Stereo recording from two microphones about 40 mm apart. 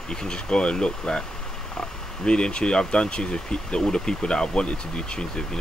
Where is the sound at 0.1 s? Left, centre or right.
Centre.